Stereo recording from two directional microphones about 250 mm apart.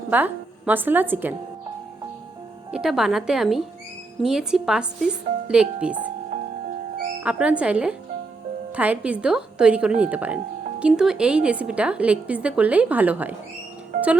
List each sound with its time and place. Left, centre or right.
0.1 s a woman's voice: centre
2.7 s a woman's voice: centre
6.3 s music: right
7.2 s a woman's voice: centre